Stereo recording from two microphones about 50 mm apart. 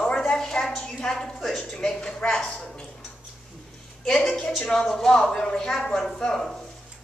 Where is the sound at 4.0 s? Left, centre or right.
Centre.